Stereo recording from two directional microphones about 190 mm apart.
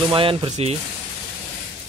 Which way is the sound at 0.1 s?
30° right (ahead or behind).